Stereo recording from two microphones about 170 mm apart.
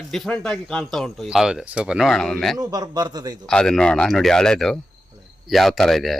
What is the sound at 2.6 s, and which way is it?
Speech, 25° right (ahead or behind).